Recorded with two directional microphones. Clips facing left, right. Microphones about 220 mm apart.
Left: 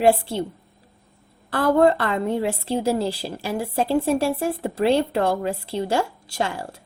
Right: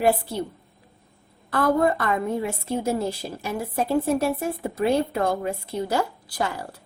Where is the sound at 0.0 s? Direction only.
30° left (ahead or behind).